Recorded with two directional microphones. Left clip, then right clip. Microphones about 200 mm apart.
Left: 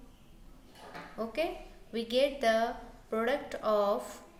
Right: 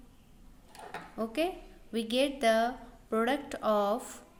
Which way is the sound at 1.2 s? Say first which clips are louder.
Right 1 dB; 40° right (ahead or behind).